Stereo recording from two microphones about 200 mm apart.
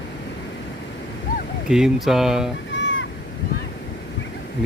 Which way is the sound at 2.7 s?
65° left (ahead or behind).